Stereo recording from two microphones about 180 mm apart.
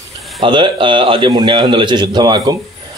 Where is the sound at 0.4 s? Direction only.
30° right (ahead or behind).